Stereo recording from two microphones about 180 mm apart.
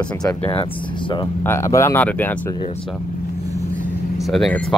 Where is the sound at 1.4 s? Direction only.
15° left (ahead or behind).